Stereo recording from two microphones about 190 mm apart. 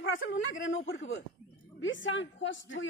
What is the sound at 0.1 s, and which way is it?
A man's voice, 85° left.